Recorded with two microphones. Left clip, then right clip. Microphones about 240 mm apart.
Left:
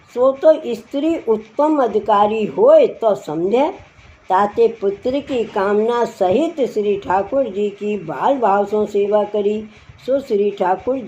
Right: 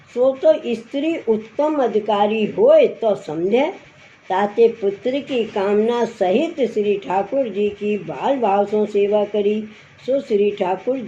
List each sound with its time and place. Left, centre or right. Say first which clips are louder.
0.2 s speech: left 2 dB; left